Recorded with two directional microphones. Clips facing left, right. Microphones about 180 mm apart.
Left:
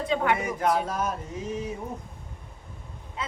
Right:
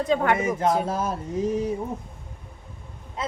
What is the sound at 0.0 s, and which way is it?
Speech, 45° right (ahead or behind).